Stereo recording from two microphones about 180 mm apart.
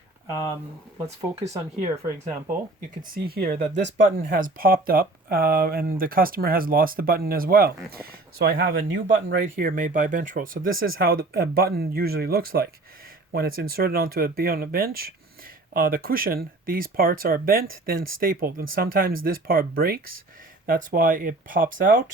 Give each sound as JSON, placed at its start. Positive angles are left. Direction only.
{"t": 1.0, "sound": "speech", "side_deg": -35}
{"t": 2.9, "sound": "speech", "side_deg": -55}
{"t": 3.8, "sound": "speech", "side_deg": -80}
{"t": 4.0, "sound": "speech", "side_deg": -50}